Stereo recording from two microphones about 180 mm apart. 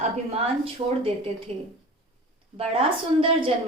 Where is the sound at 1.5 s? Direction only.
35° right (ahead or behind).